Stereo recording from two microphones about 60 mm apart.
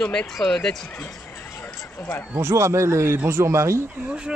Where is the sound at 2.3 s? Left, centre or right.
Right.